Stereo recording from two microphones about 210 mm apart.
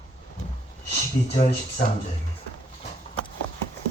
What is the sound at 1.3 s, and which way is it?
Speech, 35° left (ahead or behind).